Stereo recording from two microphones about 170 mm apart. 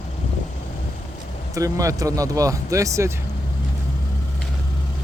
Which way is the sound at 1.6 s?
20° right (ahead or behind).